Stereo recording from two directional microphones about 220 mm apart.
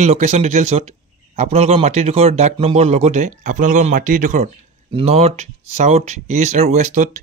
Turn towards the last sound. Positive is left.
turn(degrees=-35)  # may be behind; listen again after turning